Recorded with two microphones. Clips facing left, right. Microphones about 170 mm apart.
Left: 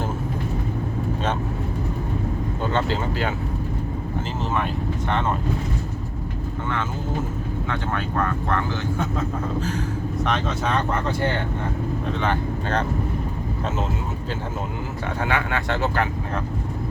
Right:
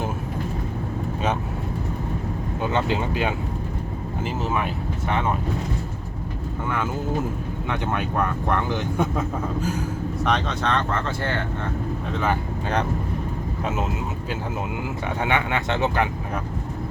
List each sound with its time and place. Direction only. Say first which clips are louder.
2.6 s speech: right 1 dB; 15° right (ahead or behind)
4.5 s speech: left 1 dB; 5° right (ahead or behind)
7.7 s speech: right 3 dB; 15° right (ahead or behind)
10.2 s speech: right 2 dB; 5° left (ahead or behind)
12.2 s speech: right 2 dB; 5° right (ahead or behind)
15.2 s speech: right 1 dB; 20° right (ahead or behind)